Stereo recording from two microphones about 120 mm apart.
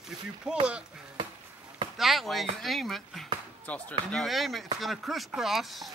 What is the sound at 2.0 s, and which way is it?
Speech, centre (ahead or behind).